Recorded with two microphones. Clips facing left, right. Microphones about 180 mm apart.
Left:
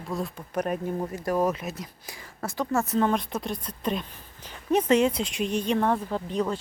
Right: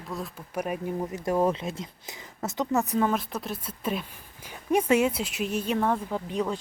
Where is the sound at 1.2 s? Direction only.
25° right (ahead or behind).